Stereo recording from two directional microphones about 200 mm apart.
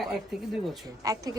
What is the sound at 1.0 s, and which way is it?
Speech, 15° right (ahead or behind).